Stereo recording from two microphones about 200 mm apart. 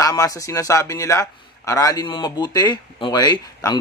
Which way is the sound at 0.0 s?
15° left (ahead or behind).